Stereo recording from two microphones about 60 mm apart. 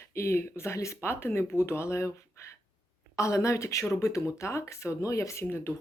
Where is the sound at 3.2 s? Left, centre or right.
Left.